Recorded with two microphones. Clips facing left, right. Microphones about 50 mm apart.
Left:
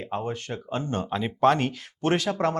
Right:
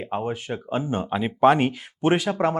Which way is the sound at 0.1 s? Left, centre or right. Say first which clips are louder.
Right 3 dB; centre.